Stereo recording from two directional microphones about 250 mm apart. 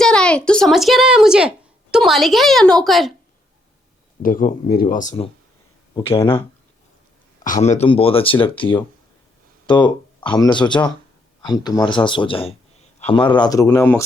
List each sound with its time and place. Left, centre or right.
0.0 s speech: centre
4.2 s speech: left
7.4 s speech: left; by 14.0 s centre